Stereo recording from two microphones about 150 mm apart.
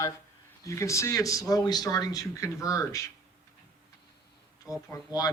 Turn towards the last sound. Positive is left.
turn(degrees=25)  # may be behind; listen again after turning